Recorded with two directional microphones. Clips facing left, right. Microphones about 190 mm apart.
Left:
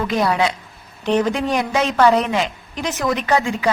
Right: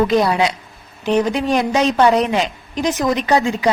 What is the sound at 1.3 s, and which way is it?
Speech, 20° right (ahead or behind).